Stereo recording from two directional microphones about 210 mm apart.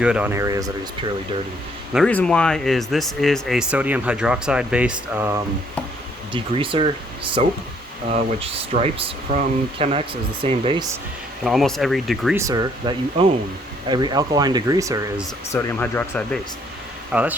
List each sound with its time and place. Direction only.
0.0 s speech: 5° right (ahead or behind)
1.9 s speech: centre (ahead or behind)
6.3 s speech: 25° right (ahead or behind)
11.4 s speech: centre (ahead or behind)
12.4 s speech: 15° right (ahead or behind)
15.5 s speech: 10° left (ahead or behind)
17.1 s speech: 5° right (ahead or behind)